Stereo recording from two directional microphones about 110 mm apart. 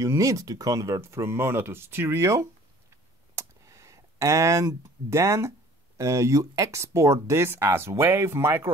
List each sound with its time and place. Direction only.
0.0 s speech: 30° right (ahead or behind)
2.9 s a sound: 25° right (ahead or behind)
5.9 s speech: 25° right (ahead or behind)